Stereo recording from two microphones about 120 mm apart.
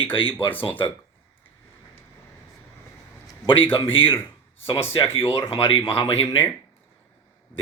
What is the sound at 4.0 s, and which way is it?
Speech, 50° left (ahead or behind).